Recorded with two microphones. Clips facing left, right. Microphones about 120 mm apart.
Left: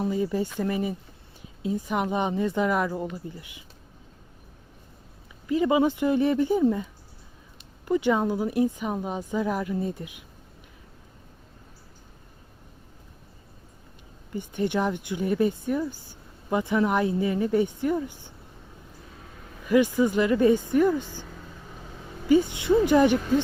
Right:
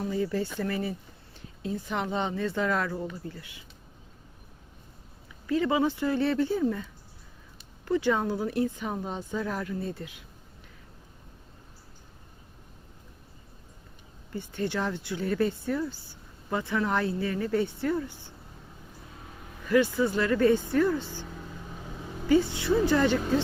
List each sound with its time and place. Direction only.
0.0 s speech: 20° left (ahead or behind)
5.5 s speech: 15° left (ahead or behind)
7.9 s speech: 15° left (ahead or behind)
14.3 s speech: 15° left (ahead or behind)
19.6 s speech: 15° left (ahead or behind)
22.3 s speech: 15° left (ahead or behind)